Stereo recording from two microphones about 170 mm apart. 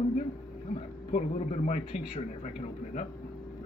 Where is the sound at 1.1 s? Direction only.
40° left (ahead or behind).